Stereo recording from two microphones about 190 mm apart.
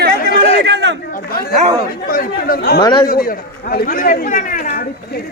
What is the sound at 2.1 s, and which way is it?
Speech, 50° left (ahead or behind).